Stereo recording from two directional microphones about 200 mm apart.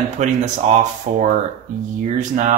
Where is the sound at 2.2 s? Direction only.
35° right (ahead or behind).